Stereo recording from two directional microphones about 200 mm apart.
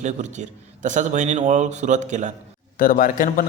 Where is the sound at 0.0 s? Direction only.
35° right (ahead or behind).